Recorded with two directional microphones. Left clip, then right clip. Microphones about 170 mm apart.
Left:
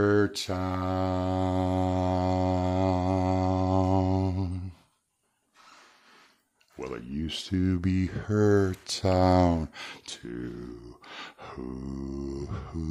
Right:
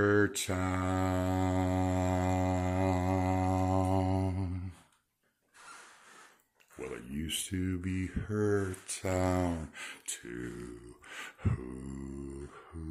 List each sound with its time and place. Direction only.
0.0 s mantra: 25° left (ahead or behind)
6.8 s speech: 40° left (ahead or behind)
11.1 s a sound: 35° left (ahead or behind)